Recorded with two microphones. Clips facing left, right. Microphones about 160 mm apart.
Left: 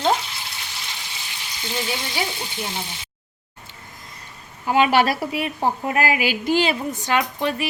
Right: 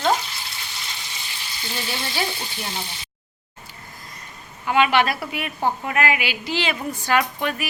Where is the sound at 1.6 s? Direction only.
15° left (ahead or behind).